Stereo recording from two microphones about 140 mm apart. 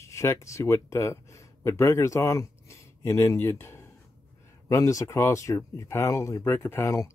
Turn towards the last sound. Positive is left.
turn(degrees=20)  # may be behind; listen again after turning